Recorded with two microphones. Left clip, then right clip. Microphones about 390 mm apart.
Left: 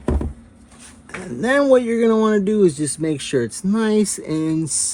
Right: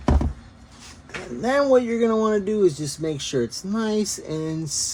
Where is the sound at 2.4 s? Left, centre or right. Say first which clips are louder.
Left 4 dB; left.